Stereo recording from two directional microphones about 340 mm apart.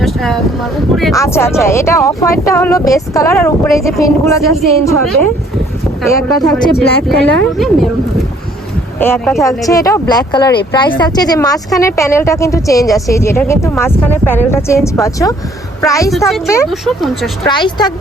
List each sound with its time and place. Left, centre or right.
0.0 s boat: centre
0.9 s speech: centre
6.0 s speech: centre
9.0 s speech: centre
17.4 s speech: centre